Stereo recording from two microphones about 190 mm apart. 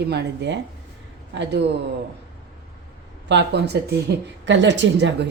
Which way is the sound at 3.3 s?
65° right (ahead or behind).